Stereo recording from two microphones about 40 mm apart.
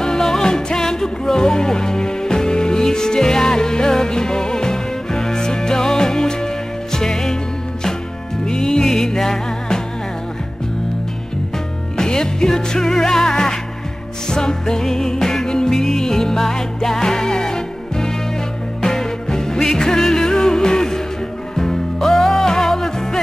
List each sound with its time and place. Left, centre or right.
0.0 s music: centre
8.5 s music: centre
12.0 s music: centre